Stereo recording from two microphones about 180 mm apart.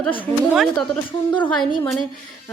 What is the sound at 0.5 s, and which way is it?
Speech, centre (ahead or behind).